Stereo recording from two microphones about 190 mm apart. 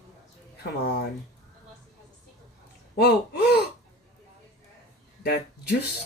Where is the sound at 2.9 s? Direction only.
55° left (ahead or behind).